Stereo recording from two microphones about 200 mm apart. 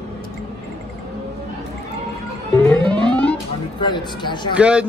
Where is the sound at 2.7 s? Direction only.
5° left (ahead or behind).